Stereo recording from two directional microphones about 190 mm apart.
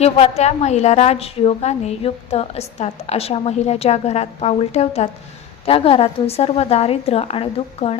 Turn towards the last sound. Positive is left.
turn(degrees=30)  # may be behind; listen again after turning